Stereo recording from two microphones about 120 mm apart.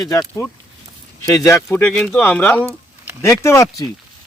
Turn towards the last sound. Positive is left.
turn(degrees=25)  # may be behind; listen again after turning